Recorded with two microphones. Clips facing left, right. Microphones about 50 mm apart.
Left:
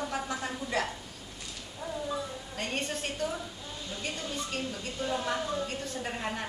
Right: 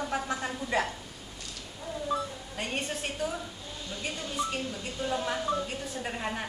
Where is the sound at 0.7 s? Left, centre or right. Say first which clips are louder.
Right 3 dB; right.